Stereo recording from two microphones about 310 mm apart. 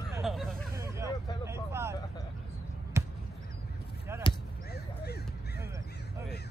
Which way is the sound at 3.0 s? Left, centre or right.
Centre.